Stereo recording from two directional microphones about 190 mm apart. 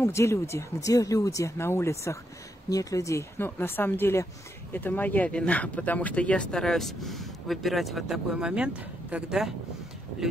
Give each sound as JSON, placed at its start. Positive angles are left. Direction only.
{"t": 0.0, "sound": "speech", "side_deg": 15}